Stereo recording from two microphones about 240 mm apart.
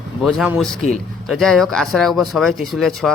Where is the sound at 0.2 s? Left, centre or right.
Centre.